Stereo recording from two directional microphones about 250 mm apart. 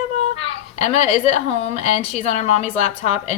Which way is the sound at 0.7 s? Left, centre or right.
Left.